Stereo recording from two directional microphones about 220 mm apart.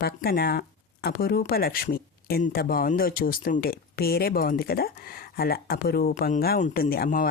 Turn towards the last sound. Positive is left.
turn(degrees=40)  # may be behind; listen again after turning